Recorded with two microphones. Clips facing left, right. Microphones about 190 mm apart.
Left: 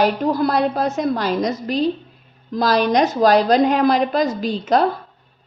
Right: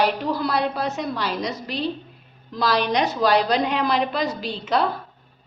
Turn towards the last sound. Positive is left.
turn(degrees=45)  # may be behind; listen again after turning